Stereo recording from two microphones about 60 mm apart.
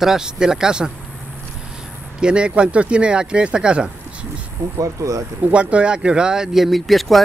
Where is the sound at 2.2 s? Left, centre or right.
Centre.